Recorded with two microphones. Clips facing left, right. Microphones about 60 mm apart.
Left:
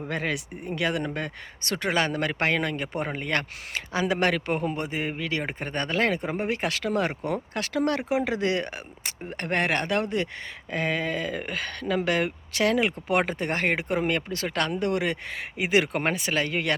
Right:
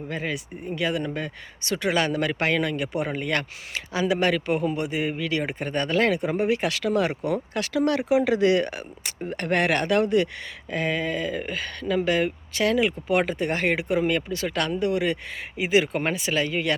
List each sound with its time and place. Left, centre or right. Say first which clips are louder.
0.1 s speech: left 1 dB; left
1.9 s a man's voice: right 2 dB; left
3.8 s a man's voice: right 1 dB; left